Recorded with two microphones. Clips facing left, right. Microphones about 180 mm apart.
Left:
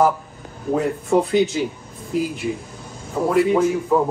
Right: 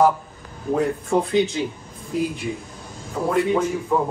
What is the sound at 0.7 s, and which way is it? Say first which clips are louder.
Speech: left 2 dB; 5° left (ahead or behind).